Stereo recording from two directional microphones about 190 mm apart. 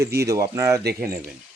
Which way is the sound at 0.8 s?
60° right (ahead or behind).